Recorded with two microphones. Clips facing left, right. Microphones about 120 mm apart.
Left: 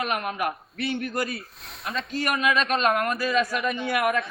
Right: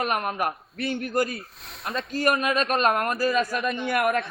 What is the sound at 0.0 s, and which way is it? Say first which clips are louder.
A man's voice: right 1 dB; 40° right (ahead or behind).